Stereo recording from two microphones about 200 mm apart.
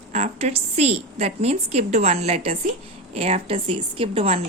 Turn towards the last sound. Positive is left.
turn(degrees=-30)  # may be behind; listen again after turning